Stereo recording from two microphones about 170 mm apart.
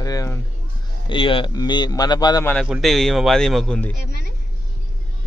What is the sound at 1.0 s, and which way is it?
A man's voice, 30° left (ahead or behind).